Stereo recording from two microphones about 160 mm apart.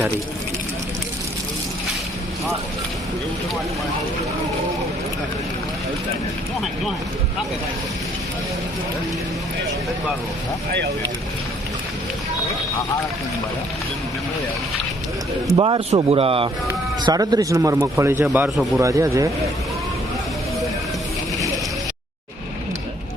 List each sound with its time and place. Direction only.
15.5 s speech: 30° right (ahead or behind)
17.0 s speech: 25° right (ahead or behind)
18.5 s a man's voice: centre (ahead or behind)
18.8 s speech: 20° right (ahead or behind)